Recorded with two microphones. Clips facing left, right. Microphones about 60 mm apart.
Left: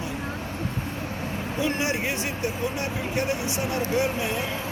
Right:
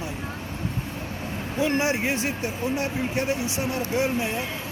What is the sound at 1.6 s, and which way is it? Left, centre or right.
Speech, right.